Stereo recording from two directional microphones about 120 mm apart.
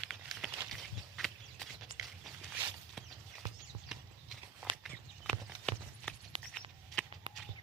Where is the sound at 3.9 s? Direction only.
5° right (ahead or behind).